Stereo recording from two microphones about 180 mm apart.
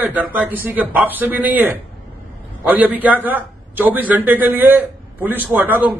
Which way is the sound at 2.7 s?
10° right (ahead or behind).